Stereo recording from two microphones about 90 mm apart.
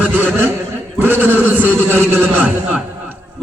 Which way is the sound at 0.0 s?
20° right (ahead or behind).